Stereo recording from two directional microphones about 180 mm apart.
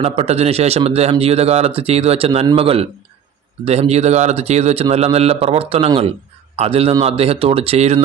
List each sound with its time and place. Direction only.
0.0 s a man's voice: 35° right (ahead or behind)